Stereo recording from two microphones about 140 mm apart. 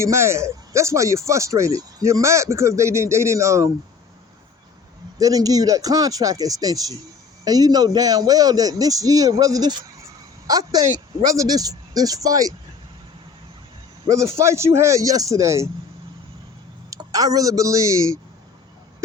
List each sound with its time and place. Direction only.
0.0 s speech: 20° right (ahead or behind)
5.2 s speech: 25° right (ahead or behind)
14.1 s speech: 20° right (ahead or behind)
16.9 s speech: 25° right (ahead or behind)